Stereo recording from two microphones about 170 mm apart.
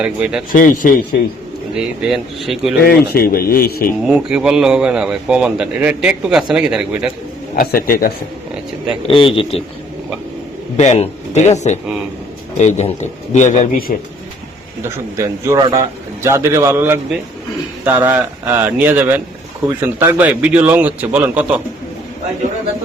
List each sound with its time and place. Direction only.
0.0 s a man's voice: 5° right (ahead or behind)
0.5 s a man's voice: 50° left (ahead or behind)
1.7 s a man's voice: 5° right (ahead or behind)
2.8 s speech: 60° left (ahead or behind)
4.0 s a man's voice: 5° right (ahead or behind)
7.5 s speech: 60° left (ahead or behind)
9.0 s speech: 30° left (ahead or behind)
10.8 s a man's voice: 40° left (ahead or behind)
14.8 s a man's voice: 15° right (ahead or behind)